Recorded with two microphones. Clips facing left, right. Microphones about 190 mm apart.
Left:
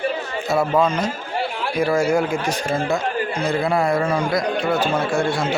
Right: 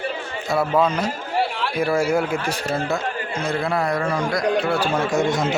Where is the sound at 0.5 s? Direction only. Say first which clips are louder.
Left 1 dB; 5° right (ahead or behind).